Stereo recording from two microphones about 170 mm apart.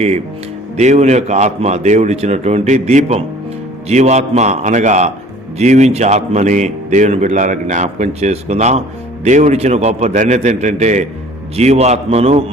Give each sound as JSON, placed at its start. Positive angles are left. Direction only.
{"t": 0.8, "sound": "a man's voice", "side_deg": -40}